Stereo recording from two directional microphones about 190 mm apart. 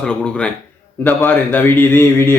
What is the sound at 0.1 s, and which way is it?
Speech, 5° left (ahead or behind).